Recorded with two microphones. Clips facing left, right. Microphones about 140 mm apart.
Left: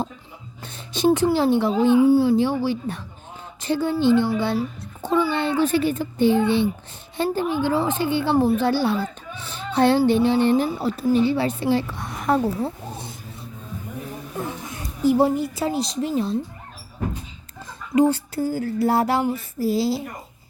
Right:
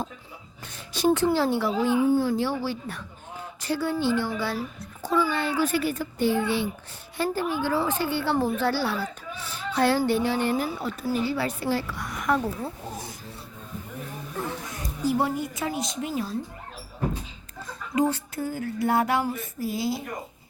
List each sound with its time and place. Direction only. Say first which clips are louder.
0.6 s speech: left 4 dB; 25° left (ahead or behind)
2.0 s a woman's voice: left 6 dB; 10° left (ahead or behind); by 13.1 s 25° left (ahead or behind)
15.0 s a woman's voice: left 7 dB; 30° left (ahead or behind)
17.9 s a woman's voice: left 6 dB; 30° left (ahead or behind)